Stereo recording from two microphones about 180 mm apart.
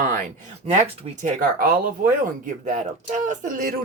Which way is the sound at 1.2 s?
50° right (ahead or behind).